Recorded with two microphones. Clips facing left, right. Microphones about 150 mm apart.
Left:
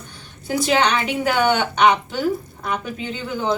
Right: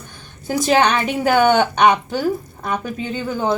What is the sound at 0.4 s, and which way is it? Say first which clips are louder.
A woman's voice: right 3 dB; 45° right (ahead or behind).